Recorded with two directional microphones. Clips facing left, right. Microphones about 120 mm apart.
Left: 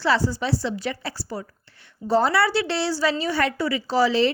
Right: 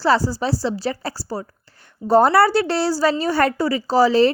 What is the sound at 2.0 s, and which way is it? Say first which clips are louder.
A woman's voice: right 6 dB; 50° right (ahead or behind).